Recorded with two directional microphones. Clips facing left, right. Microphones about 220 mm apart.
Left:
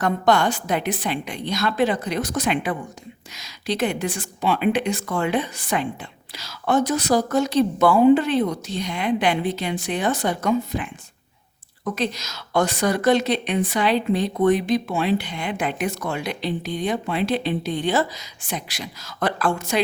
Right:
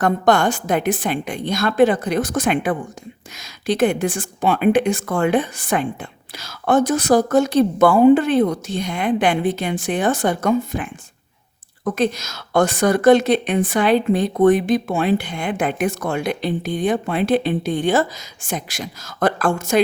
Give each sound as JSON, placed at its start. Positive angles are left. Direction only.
{"t": 0.0, "sound": "a woman's voice", "side_deg": -50}
{"t": 11.9, "sound": "a woman's voice", "side_deg": -50}